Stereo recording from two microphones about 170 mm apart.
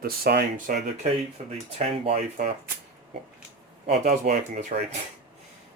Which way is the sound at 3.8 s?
45° right (ahead or behind).